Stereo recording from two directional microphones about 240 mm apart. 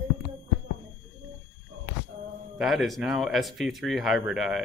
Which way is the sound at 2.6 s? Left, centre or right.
Centre.